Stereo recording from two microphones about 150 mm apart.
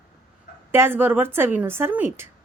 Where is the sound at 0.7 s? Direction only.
15° right (ahead or behind).